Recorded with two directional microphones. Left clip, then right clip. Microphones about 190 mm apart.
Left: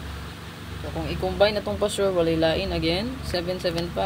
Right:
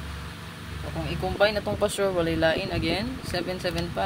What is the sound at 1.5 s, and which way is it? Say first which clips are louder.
Speech: left 1 dB; 40° right (ahead or behind).